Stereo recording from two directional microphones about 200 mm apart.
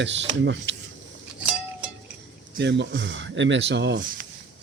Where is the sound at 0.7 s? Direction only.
60° right (ahead or behind).